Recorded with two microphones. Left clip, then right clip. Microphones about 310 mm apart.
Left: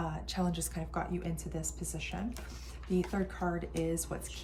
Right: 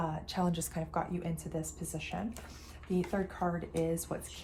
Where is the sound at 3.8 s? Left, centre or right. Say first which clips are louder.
Right 3 dB; centre.